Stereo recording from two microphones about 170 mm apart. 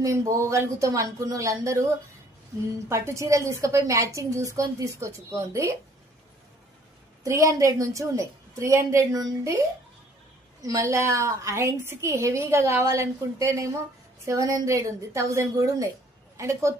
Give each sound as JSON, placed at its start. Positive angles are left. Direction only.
{"t": 0.0, "sound": "a woman's voice", "side_deg": -20}
{"t": 2.9, "sound": "a woman's voice", "side_deg": -15}
{"t": 7.2, "sound": "a woman's voice", "side_deg": -20}